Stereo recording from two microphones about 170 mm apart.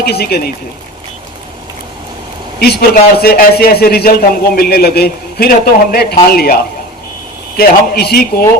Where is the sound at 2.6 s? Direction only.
60° left (ahead or behind).